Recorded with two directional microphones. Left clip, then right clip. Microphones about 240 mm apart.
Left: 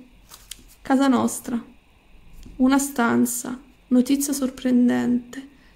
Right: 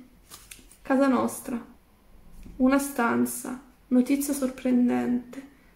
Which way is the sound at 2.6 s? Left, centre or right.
Left.